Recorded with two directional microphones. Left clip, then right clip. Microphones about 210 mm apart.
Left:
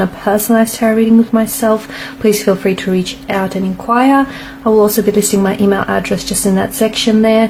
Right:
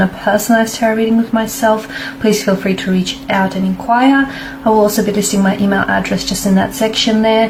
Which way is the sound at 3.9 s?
45° left (ahead or behind).